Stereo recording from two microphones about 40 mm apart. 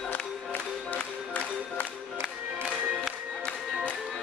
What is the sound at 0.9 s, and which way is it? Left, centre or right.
Music, left.